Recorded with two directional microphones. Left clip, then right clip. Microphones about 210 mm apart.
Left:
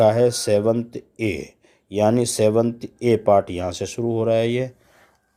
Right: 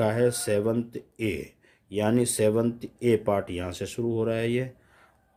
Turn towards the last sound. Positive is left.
turn(degrees=20)  # may be behind; listen again after turning